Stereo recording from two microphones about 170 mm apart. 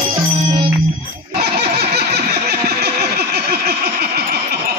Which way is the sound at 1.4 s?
65° right (ahead or behind).